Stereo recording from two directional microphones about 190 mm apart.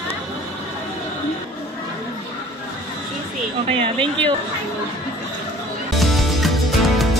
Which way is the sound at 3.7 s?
30° right (ahead or behind).